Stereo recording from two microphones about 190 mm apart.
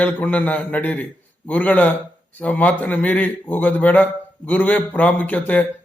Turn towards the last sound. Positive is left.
turn(degrees=10)  # may be behind; listen again after turning